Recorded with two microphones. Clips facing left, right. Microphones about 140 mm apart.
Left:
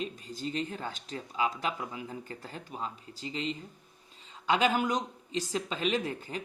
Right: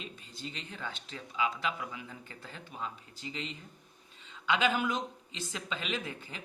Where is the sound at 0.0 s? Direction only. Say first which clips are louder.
Left 8 dB; 40° left (ahead or behind).